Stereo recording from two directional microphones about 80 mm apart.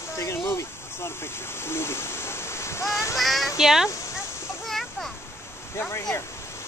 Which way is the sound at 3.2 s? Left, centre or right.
Centre.